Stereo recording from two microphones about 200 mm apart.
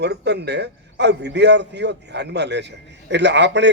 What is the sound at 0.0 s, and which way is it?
A man's voice, 55° right (ahead or behind).